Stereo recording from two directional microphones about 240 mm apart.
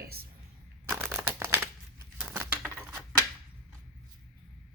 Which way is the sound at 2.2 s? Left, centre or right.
Centre.